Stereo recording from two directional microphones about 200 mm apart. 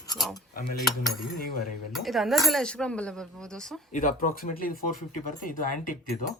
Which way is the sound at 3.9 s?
40° left (ahead or behind).